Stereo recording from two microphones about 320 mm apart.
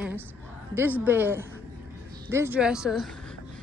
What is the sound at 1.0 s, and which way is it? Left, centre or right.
Speech, centre.